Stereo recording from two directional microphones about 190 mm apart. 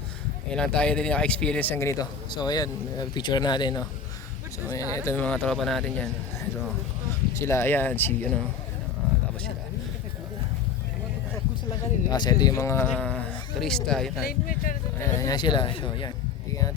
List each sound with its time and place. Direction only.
0.5 s a man's voice: 5° left (ahead or behind)
7.3 s a man's voice: 15° left (ahead or behind)
11.7 s a man's voice: 20° left (ahead or behind); by 14.1 s 5° left (ahead or behind)
14.2 s speech: 50° left (ahead or behind)
14.9 s speech: 15° left (ahead or behind)